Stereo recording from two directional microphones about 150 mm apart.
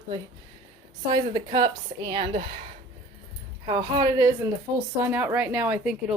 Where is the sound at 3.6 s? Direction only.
30° right (ahead or behind).